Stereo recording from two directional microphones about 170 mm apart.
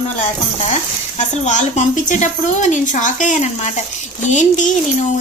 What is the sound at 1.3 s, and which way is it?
Speech, 45° left (ahead or behind).